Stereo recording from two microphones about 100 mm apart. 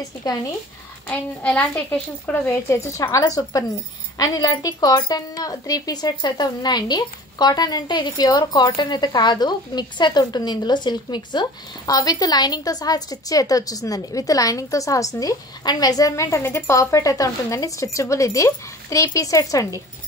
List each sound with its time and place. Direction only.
1.0 s a woman's voice: 15° left (ahead or behind)
2.3 s speech: 25° left (ahead or behind)